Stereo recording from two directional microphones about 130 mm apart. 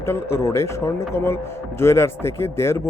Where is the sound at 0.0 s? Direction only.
20° left (ahead or behind).